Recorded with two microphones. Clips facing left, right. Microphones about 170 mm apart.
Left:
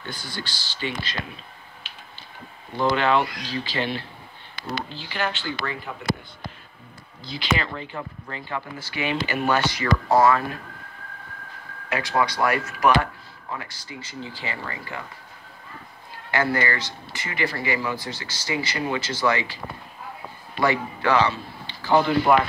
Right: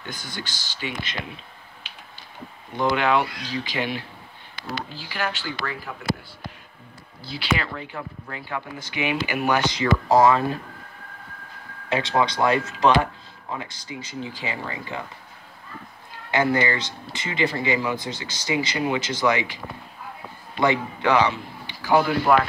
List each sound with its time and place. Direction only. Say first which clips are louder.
0.0 s speech: left 1 dB; 15° right (ahead or behind)
2.9 s speech: even; 10° right (ahead or behind)
7.2 s speech: even; 10° right (ahead or behind)
11.9 s speech: right 2 dB; 25° right (ahead or behind)
16.3 s speech: right 2 dB; 20° right (ahead or behind)
20.6 s a man's voice: right 1 dB; 20° right (ahead or behind)